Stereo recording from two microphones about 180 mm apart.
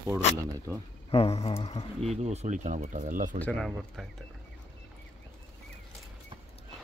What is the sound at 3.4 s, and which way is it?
Speech, 5° left (ahead or behind).